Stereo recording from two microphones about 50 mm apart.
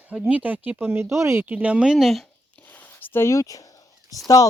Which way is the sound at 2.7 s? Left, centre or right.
Left.